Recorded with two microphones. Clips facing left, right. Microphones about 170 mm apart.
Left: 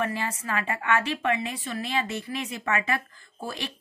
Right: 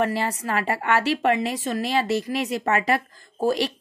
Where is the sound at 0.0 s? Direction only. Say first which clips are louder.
Right 6 dB; 35° right (ahead or behind).